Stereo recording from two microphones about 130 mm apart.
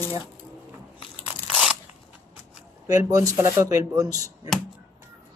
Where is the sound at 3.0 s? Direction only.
25° right (ahead or behind).